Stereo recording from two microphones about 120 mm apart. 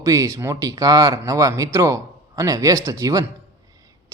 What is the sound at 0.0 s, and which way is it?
Speech, 25° right (ahead or behind).